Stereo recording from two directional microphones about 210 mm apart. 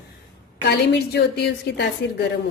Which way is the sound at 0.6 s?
50° left (ahead or behind).